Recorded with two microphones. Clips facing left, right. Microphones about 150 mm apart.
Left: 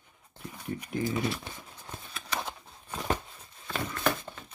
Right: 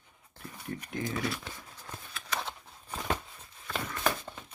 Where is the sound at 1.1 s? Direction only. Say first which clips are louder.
Left 3 dB; 20° left (ahead or behind).